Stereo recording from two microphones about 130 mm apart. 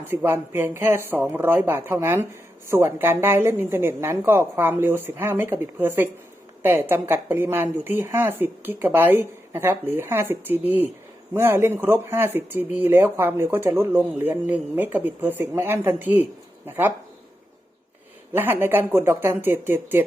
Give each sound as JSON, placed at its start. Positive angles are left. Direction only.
{"t": 0.1, "sound": "speech", "side_deg": -15}
{"t": 18.3, "sound": "speech", "side_deg": -15}